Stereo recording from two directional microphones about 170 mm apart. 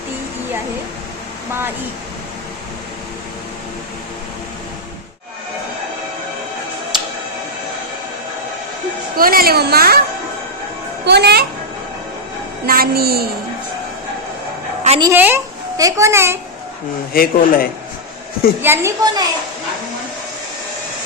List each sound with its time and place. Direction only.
9.1 s a woman's voice: 60° right (ahead or behind)
11.0 s a child's voice: 75° right (ahead or behind)
12.6 s a woman's voice: 60° right (ahead or behind)
15.0 s a child's voice: 10° right (ahead or behind)
17.1 s speech: 60° left (ahead or behind)
18.6 s a child's voice: 15° right (ahead or behind)